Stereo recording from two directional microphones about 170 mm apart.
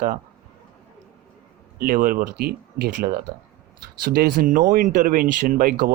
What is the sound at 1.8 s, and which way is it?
Speech, 55° right (ahead or behind).